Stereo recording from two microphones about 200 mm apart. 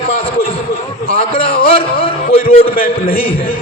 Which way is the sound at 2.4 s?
45° left (ahead or behind).